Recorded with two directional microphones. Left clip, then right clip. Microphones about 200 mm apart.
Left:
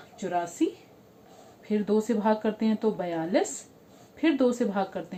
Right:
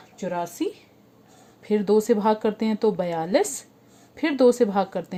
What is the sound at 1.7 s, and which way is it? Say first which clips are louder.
A woman's voice: right 7 dB; 40° right (ahead or behind).